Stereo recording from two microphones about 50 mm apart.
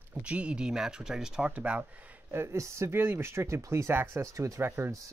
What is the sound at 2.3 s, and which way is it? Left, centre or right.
Speech, right.